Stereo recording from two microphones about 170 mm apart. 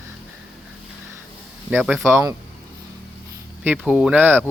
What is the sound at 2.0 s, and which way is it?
Speech, 15° right (ahead or behind).